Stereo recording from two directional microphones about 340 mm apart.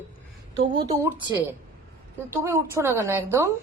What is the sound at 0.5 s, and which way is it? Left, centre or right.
Speech, right.